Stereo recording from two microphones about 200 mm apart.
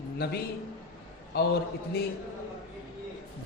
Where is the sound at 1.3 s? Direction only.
55° left (ahead or behind).